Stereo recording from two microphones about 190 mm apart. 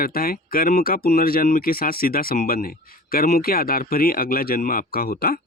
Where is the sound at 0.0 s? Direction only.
50° left (ahead or behind).